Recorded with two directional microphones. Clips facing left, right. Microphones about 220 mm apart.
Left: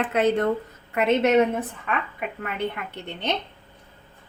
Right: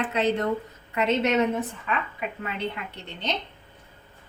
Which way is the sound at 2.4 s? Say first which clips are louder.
Left 4 dB; 55° left (ahead or behind).